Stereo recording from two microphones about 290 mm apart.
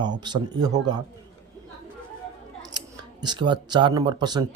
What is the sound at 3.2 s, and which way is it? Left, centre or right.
Speech, centre.